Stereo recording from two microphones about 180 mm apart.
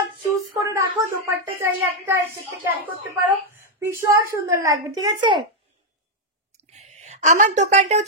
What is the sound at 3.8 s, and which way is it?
Speech, 15° right (ahead or behind).